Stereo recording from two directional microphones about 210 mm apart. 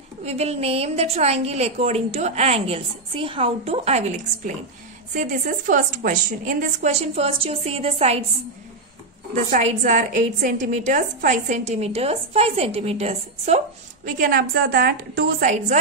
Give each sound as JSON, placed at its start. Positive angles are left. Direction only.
{"t": 0.2, "sound": "a woman's voice", "side_deg": -30}
{"t": 5.1, "sound": "a woman's voice", "side_deg": -40}
{"t": 9.3, "sound": "a woman's voice", "side_deg": -35}
{"t": 14.0, "sound": "a woman's voice", "side_deg": -40}